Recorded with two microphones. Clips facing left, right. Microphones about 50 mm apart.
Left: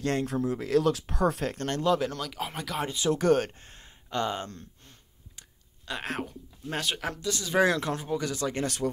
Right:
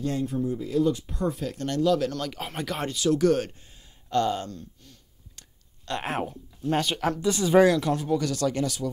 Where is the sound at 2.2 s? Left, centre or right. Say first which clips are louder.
Right 3 dB; centre.